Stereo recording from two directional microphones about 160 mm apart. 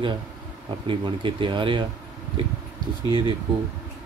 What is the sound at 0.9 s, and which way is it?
Speech, 30° right (ahead or behind).